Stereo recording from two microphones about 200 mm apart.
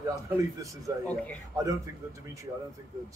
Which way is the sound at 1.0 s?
5° left (ahead or behind).